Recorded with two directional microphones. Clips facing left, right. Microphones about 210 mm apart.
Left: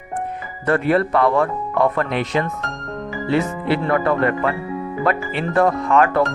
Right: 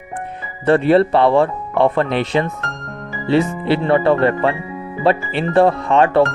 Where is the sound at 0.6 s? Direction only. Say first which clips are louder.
Right 5 dB; 30° right (ahead or behind).